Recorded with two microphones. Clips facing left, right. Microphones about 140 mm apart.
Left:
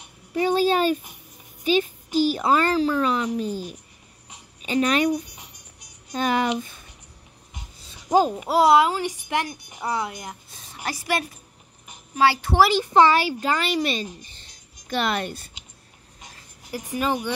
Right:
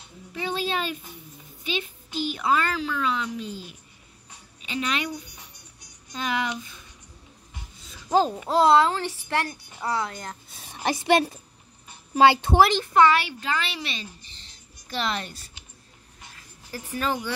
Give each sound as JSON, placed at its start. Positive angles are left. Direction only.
{"t": 0.3, "sound": "a sound", "side_deg": 40}
{"t": 1.6, "sound": "a child's voice", "side_deg": 40}
{"t": 5.1, "sound": "music", "side_deg": 90}
{"t": 6.1, "sound": "speech", "side_deg": 45}
{"t": 7.5, "sound": "speech", "side_deg": 15}
{"t": 10.9, "sound": "a woman's voice", "side_deg": -25}
{"t": 12.5, "sound": "speech", "side_deg": 5}
{"t": 12.9, "sound": "speech", "side_deg": 35}
{"t": 14.9, "sound": "a woman's voice", "side_deg": 55}
{"t": 16.2, "sound": "a sound", "side_deg": 15}